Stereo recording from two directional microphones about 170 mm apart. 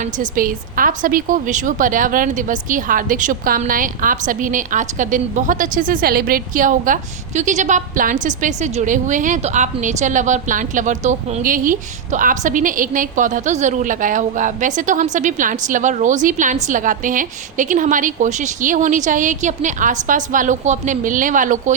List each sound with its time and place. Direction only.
0.0 s a woman's voice: 50° right (ahead or behind)